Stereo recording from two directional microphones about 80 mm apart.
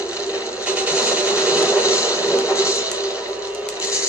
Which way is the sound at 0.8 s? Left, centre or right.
Centre.